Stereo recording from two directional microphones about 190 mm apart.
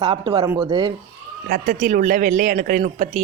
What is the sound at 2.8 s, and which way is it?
Speech, 30° right (ahead or behind).